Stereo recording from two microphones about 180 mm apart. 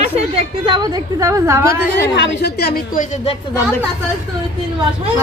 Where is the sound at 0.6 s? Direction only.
25° right (ahead or behind).